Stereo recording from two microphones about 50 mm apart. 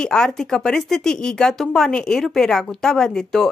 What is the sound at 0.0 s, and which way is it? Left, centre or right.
A woman's voice, centre.